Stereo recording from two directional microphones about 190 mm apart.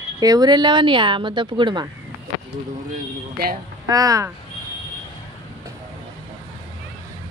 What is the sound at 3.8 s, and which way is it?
Speech, 20° right (ahead or behind).